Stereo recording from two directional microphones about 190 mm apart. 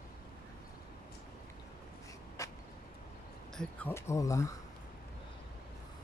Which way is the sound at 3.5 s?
10° left (ahead or behind).